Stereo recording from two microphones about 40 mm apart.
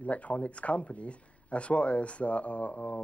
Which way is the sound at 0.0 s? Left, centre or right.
Left.